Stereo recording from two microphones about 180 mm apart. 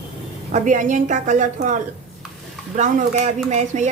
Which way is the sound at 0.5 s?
45° right (ahead or behind).